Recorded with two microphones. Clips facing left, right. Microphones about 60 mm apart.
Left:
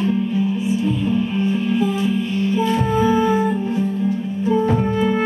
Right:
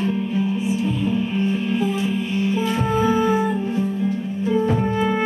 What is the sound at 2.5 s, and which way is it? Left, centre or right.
Music, centre.